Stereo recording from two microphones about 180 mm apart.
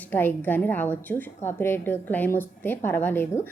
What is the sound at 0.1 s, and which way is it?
A woman's voice, 10° left (ahead or behind).